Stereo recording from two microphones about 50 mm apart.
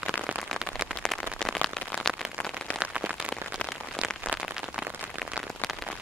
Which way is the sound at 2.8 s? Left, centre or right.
Centre.